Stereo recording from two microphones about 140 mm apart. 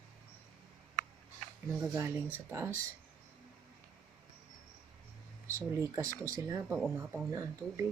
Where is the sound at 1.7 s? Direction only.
15° right (ahead or behind).